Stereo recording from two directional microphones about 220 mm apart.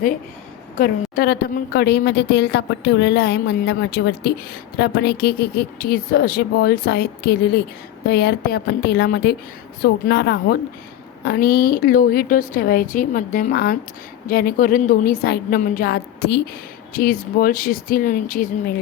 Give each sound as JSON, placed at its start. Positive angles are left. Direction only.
{"t": 1.1, "sound": "a woman's voice", "side_deg": 45}